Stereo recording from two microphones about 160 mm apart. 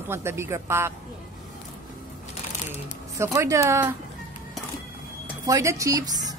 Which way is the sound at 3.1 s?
20° right (ahead or behind).